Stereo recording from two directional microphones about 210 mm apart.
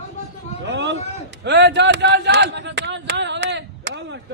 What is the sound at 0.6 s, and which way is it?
A man's voice, 60° right (ahead or behind).